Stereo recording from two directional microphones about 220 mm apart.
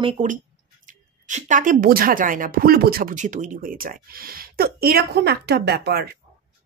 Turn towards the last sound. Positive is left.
turn(degrees=-45)  # may be behind; listen again after turning